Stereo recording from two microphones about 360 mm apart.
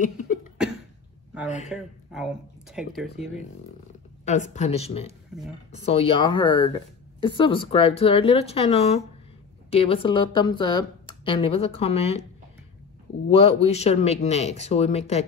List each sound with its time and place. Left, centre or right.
1.7 s speech: centre
4.2 s speech: centre
5.3 s speech: centre
5.7 s speech: centre
13.3 s speech: centre